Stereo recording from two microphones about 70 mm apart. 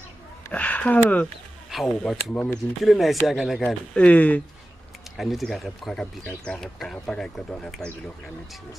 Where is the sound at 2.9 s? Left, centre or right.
Centre.